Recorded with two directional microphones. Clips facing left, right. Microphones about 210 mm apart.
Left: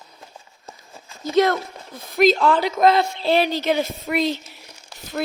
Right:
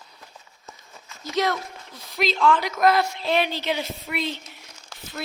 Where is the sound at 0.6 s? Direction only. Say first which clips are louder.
Left 3 dB; 30° left (ahead or behind).